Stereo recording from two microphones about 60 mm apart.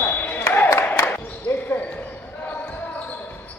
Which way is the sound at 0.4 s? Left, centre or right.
Left.